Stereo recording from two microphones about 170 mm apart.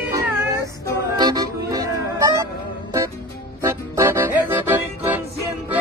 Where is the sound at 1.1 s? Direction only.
25° right (ahead or behind).